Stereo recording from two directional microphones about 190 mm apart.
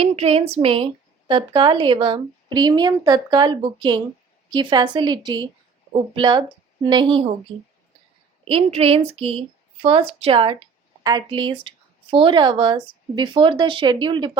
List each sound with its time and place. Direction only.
0.0 s a sound: 30° right (ahead or behind)
1.3 s a woman's voice: 25° right (ahead or behind)
8.4 s a woman's voice: 30° right (ahead or behind)